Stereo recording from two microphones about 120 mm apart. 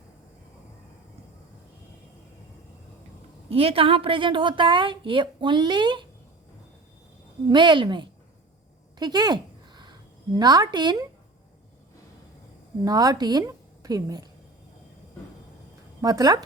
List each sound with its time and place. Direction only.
3.5 s a woman's voice: 55° right (ahead or behind)
7.4 s a woman's voice: 40° right (ahead or behind)
9.0 s a sound: 35° right (ahead or behind)
12.8 s a woman's voice: 30° right (ahead or behind)
16.0 s speech: 30° right (ahead or behind)